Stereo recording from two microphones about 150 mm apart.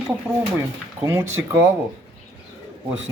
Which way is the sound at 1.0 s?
15° right (ahead or behind).